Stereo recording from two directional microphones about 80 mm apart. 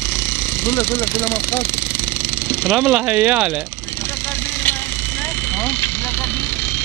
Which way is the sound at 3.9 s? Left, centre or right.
Left.